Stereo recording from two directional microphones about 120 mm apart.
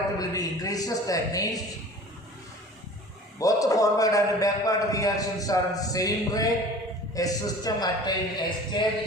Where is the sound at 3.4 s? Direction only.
30° left (ahead or behind).